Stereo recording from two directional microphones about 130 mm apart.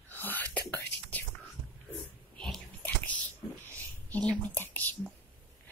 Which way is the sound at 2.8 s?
10° left (ahead or behind).